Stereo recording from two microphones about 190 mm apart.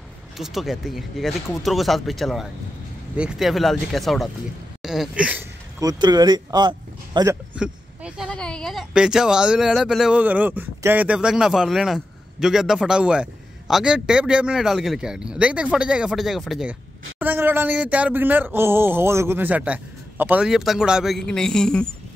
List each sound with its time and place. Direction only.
0.4 s speech: centre (ahead or behind)
5.8 s speech: 20° right (ahead or behind)
7.5 s a sound: 5° right (ahead or behind)
8.3 s speech: 5° left (ahead or behind)